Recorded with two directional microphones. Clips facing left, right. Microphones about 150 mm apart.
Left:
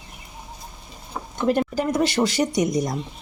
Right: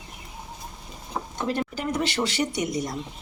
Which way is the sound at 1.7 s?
40° left (ahead or behind).